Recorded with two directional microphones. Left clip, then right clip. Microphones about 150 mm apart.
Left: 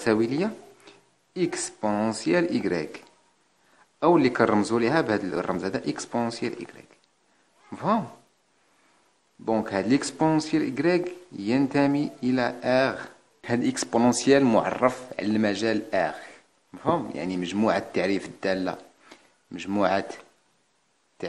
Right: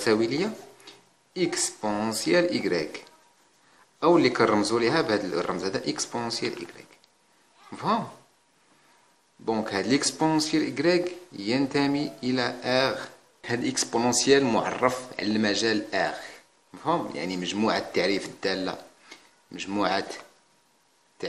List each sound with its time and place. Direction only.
0.0 s speech: 45° left (ahead or behind)
4.0 s speech: 45° left (ahead or behind)
9.4 s speech: 40° left (ahead or behind)
21.2 s a sound: 50° left (ahead or behind)